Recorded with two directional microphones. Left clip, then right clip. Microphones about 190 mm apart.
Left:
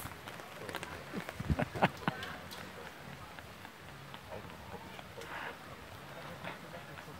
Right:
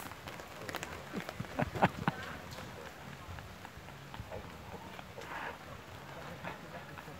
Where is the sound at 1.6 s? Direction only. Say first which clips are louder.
Right 1 dB; centre (ahead or behind).